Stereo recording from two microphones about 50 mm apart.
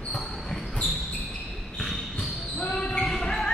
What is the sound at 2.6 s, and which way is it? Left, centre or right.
Basketball bounce, centre.